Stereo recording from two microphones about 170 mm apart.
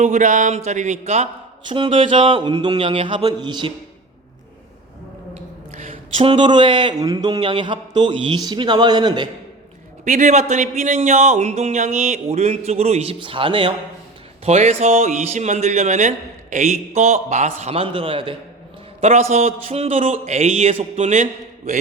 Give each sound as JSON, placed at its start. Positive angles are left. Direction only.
{"t": 0.0, "sound": "speech", "side_deg": -45}
{"t": 1.6, "sound": "speech", "side_deg": -30}
{"t": 5.7, "sound": "speech", "side_deg": -40}
{"t": 10.0, "sound": "a man's voice", "side_deg": -50}
{"t": 14.4, "sound": "a man's voice", "side_deg": -40}